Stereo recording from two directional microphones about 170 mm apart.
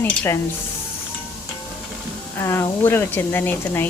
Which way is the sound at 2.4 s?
15° left (ahead or behind).